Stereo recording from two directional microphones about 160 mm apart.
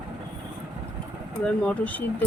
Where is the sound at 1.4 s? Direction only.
5° left (ahead or behind).